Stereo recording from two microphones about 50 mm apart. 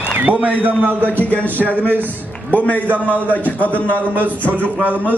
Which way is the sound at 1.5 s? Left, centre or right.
Right.